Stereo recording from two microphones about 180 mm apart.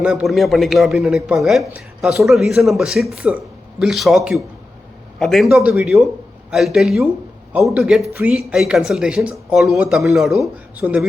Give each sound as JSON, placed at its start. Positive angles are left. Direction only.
{"t": 0.0, "sound": "speech", "side_deg": -5}